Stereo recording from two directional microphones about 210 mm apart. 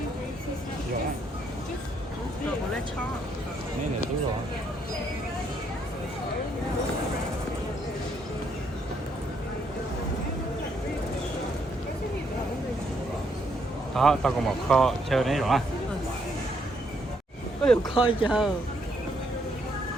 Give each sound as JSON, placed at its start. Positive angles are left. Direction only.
{"t": 13.9, "sound": "speech", "side_deg": 0}
{"t": 17.6, "sound": "speech", "side_deg": 5}
{"t": 17.9, "sound": "speech", "side_deg": 25}
{"t": 18.3, "sound": "speech", "side_deg": 0}